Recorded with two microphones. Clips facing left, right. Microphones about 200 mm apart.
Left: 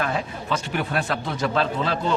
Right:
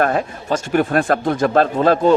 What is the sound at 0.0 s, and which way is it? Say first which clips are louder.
Speech: right 8 dB; 50° right (ahead or behind).